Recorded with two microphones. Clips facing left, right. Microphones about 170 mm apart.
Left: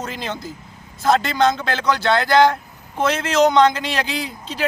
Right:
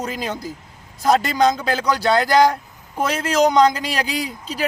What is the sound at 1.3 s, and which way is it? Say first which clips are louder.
Speech: right 1 dB; 10° right (ahead or behind).